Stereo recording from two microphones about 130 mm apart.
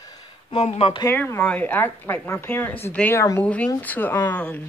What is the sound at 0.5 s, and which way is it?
Speech, 45° left (ahead or behind).